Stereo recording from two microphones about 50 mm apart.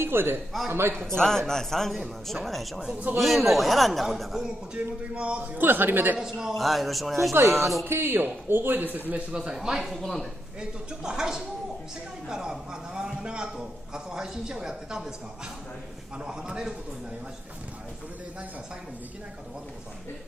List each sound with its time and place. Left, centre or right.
0.0 s a man's voice: right
1.1 s a man's voice: centre
4.7 s a man's voice: right
5.4 s a man's voice: right
6.1 s a man's voice: centre
6.5 s speech: centre
7.3 s a man's voice: right
9.3 s a man's voice: centre
9.8 s speech: centre
10.6 s a man's voice: centre
16.2 s a man's voice: centre